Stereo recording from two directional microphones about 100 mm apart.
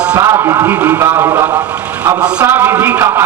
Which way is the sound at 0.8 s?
20° right (ahead or behind).